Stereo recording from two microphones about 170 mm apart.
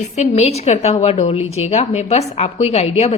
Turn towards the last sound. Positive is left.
turn(degrees=40)  # may be behind; listen again after turning